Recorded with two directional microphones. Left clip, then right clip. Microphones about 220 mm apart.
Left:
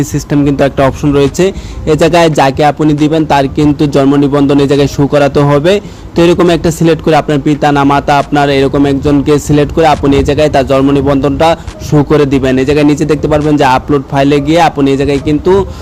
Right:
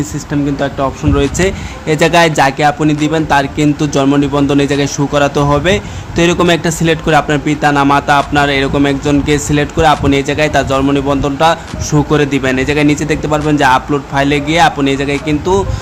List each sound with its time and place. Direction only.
0.0 s speech: 30° left (ahead or behind)